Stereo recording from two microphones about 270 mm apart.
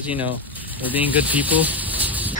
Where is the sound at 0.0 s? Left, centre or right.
Centre.